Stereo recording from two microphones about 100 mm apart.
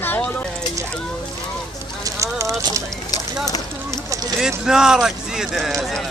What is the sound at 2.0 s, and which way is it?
Clip-clop, 30° right (ahead or behind).